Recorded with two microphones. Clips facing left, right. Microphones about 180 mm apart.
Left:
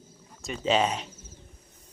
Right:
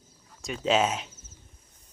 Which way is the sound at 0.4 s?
Centre (ahead or behind).